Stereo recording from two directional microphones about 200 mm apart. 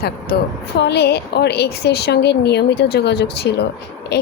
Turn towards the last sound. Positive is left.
turn(degrees=55)  # may be behind; listen again after turning